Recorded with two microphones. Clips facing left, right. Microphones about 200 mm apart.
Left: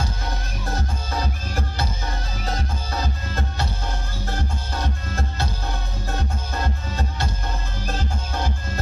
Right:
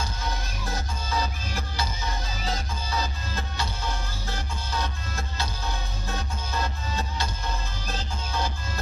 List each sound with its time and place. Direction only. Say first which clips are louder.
0.7 s music: left 4 dB; 50° left (ahead or behind)